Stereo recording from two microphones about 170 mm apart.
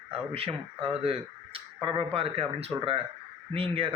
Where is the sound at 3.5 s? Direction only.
30° right (ahead or behind).